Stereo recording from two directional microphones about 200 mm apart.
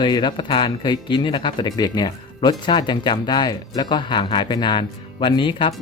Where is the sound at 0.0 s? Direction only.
25° left (ahead or behind).